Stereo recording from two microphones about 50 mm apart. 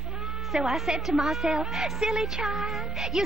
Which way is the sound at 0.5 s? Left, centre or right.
Centre.